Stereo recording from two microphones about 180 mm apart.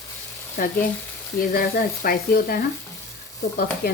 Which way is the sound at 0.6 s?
65° left (ahead or behind).